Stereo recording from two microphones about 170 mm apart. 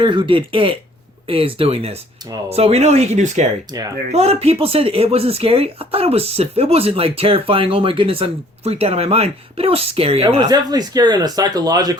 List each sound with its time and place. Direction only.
0.0 s speech: 30° right (ahead or behind)
3.7 s speech: 25° right (ahead or behind)
4.1 s speech: 40° right (ahead or behind); by 11.9 s 25° right (ahead or behind)